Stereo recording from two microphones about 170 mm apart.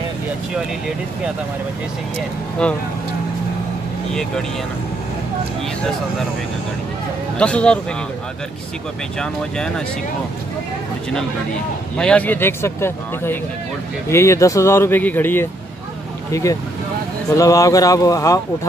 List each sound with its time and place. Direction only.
2.6 s a man's voice: 5° left (ahead or behind)
4.1 s speech: 5° left (ahead or behind)
7.3 s a man's voice: 5° left (ahead or behind)
9.2 s speech: 5° left (ahead or behind)
12.0 s a man's voice: 5° left (ahead or behind)